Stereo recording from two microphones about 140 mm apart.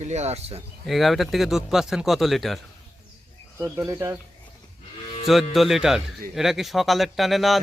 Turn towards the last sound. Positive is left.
turn(degrees=0)  # may be behind; listen again after turning